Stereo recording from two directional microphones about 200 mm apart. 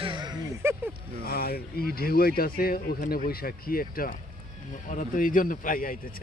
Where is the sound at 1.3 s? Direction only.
50° left (ahead or behind).